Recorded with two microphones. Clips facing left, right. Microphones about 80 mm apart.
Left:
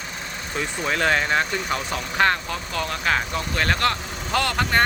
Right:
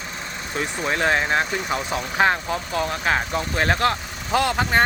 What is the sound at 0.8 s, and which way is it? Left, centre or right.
Speech, centre.